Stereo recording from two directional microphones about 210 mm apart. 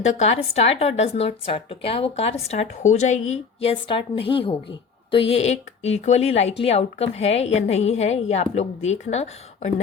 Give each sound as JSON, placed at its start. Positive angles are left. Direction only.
{"t": 0.0, "sound": "speech", "side_deg": 30}